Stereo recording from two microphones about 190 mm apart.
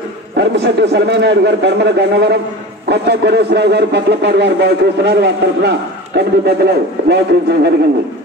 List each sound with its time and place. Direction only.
0.4 s speech: 65° right (ahead or behind)